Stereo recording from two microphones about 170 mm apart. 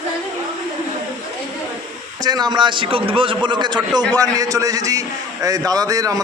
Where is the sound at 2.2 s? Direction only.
25° right (ahead or behind).